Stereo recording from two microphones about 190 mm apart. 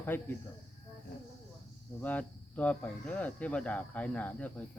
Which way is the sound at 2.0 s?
10° left (ahead or behind).